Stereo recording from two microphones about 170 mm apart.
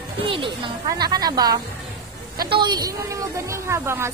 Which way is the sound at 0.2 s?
30° right (ahead or behind).